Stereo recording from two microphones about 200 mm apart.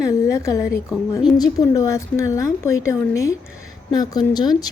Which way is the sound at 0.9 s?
5° right (ahead or behind).